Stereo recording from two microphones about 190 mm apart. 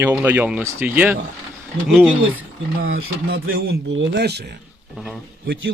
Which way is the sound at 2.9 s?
90° right.